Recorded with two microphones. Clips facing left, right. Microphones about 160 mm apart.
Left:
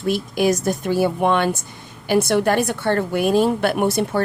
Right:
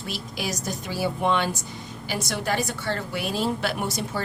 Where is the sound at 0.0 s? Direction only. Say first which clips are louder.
Left 13 dB; 50° left (ahead or behind).